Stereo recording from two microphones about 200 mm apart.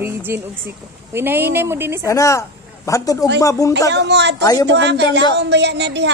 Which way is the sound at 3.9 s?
60° right (ahead or behind).